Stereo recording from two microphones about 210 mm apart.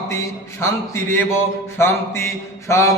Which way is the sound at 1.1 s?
10° left (ahead or behind).